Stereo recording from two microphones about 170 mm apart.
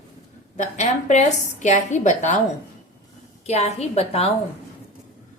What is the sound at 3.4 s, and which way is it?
Speech, 40° left (ahead or behind).